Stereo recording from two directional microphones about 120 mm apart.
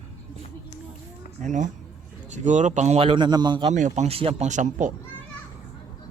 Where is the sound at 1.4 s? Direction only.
90° right.